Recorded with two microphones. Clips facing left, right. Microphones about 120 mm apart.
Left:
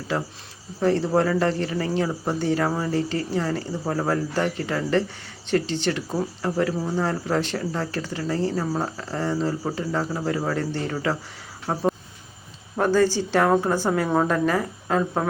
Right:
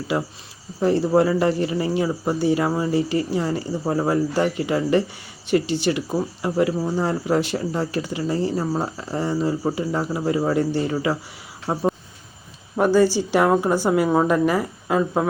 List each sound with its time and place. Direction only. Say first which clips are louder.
0.1 s speech: right 2 dB; 15° right (ahead or behind)